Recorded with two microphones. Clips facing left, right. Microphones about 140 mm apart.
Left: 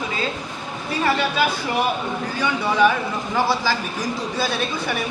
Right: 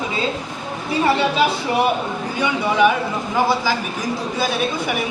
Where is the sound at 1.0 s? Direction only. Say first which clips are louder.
Right 3 dB; 25° right (ahead or behind).